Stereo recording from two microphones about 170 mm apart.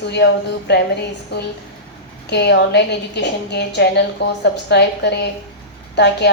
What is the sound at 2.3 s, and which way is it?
A woman's voice, 80° left.